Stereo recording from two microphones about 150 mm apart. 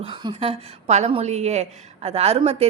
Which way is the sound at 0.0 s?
35° right (ahead or behind).